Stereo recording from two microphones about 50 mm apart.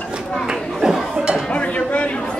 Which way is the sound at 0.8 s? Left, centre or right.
Centre.